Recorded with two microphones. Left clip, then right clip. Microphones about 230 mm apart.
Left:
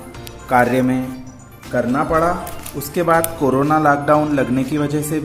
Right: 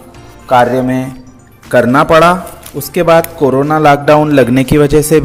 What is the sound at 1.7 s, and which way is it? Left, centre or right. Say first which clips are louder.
A man's voice: right 10 dB; right.